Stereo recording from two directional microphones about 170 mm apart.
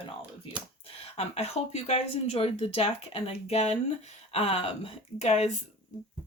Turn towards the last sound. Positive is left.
turn(degrees=40)  # may be behind; listen again after turning